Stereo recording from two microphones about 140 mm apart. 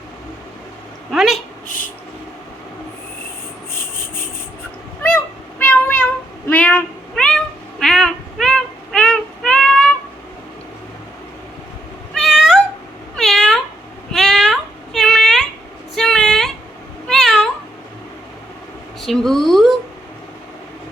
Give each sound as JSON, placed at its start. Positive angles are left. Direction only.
{"t": 1.1, "sound": "speech", "side_deg": 0}
{"t": 1.6, "sound": "dishes", "side_deg": 70}
{"t": 5.0, "sound": "meow", "side_deg": 10}
{"t": 6.5, "sound": "cat", "side_deg": 10}
{"t": 12.1, "sound": "cat", "side_deg": 0}
{"t": 14.1, "sound": "child singing", "side_deg": 0}
{"t": 16.0, "sound": "a sound", "side_deg": 5}
{"t": 17.1, "sound": "cat", "side_deg": 0}
{"t": 19.0, "sound": "a sound", "side_deg": 0}